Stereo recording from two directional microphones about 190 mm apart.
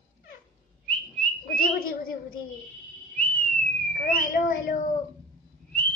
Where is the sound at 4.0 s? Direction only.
50° left (ahead or behind).